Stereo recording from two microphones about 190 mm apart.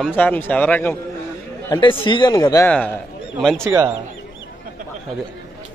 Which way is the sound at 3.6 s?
20° right (ahead or behind).